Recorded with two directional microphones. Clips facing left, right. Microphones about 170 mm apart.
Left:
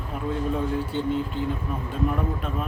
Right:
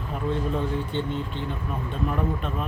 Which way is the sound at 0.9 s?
5° left (ahead or behind).